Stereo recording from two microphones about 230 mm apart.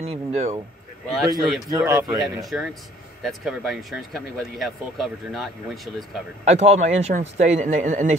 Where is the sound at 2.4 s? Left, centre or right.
Centre.